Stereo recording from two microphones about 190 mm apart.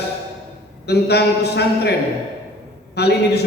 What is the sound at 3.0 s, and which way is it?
Speech, 60° left (ahead or behind).